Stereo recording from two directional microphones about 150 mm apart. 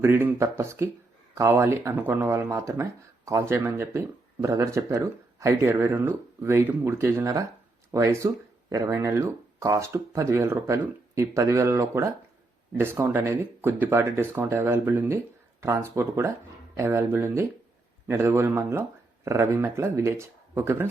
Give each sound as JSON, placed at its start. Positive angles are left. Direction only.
{"t": 0.0, "sound": "speech", "side_deg": -15}